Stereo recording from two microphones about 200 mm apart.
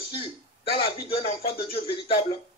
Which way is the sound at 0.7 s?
30° left (ahead or behind).